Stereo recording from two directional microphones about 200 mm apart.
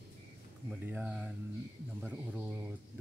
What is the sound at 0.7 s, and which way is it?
Speech, 10° right (ahead or behind).